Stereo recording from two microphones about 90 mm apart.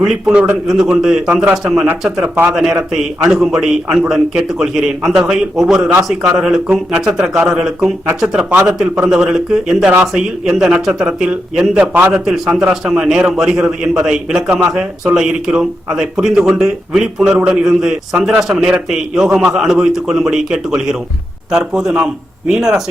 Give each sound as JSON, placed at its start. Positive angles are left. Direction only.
{"t": 0.0, "sound": "a man's voice", "side_deg": -5}
{"t": 1.3, "sound": "a man's voice", "side_deg": -15}
{"t": 1.6, "sound": "a man's voice", "side_deg": -5}
{"t": 2.2, "sound": "speech", "side_deg": -20}
{"t": 2.5, "sound": "a man's voice", "side_deg": -5}